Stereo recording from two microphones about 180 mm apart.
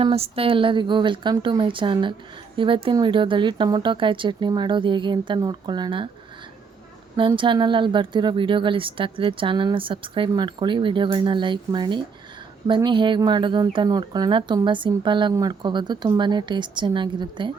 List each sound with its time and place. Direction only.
0.0 s speech: 30° right (ahead or behind)
7.2 s speech: 25° right (ahead or behind)